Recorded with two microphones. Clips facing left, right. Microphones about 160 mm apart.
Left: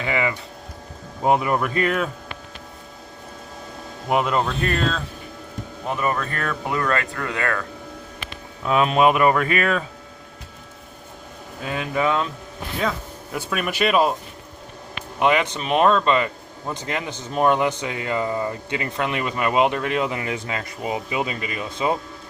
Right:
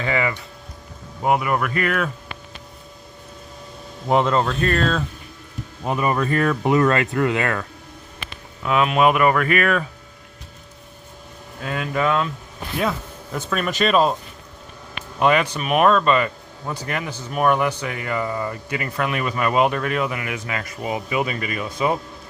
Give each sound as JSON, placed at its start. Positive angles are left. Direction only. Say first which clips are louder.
{"t": 0.0, "sound": "speech", "louder": "right 1 dB", "side_deg": 20}
{"t": 4.1, "sound": "speech", "louder": "right 2 dB", "side_deg": 10}
{"t": 5.9, "sound": "speech", "louder": "right 4 dB", "side_deg": -10}
{"t": 8.6, "sound": "speech", "louder": "even", "side_deg": 35}
{"t": 11.6, "sound": "speech", "louder": "even", "side_deg": 15}
{"t": 13.3, "sound": "speech", "louder": "right 2 dB", "side_deg": 10}
{"t": 15.2, "sound": "a man's voice", "louder": "right 1 dB", "side_deg": 20}